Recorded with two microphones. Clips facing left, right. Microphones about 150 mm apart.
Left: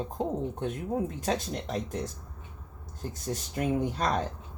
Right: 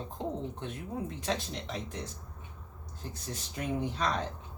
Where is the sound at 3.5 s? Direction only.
45° left (ahead or behind).